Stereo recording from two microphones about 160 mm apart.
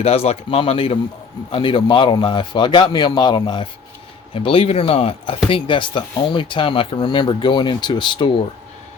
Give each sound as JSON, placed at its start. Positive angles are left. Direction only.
{"t": 0.0, "sound": "a man's voice", "side_deg": 40}